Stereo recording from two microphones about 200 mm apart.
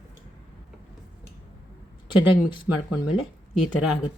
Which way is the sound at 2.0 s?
25° left (ahead or behind).